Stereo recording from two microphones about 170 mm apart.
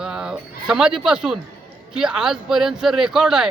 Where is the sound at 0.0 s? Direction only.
5° right (ahead or behind).